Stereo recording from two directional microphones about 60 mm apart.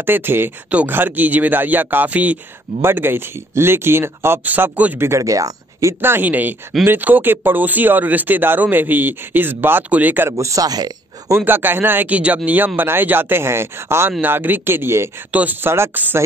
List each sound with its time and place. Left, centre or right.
0.0 s speech: right
2.8 s speech: right
4.9 s speech: right
5.2 s speech: right
5.9 s speech: right
10.3 s speech: right
11.3 s speech: right
14.2 s speech: right
15.9 s speech: right